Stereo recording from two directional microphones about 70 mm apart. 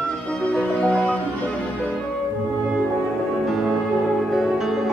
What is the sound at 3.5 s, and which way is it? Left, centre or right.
Music, centre.